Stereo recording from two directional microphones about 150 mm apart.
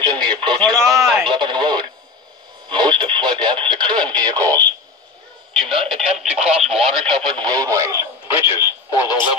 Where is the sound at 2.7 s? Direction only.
30° right (ahead or behind).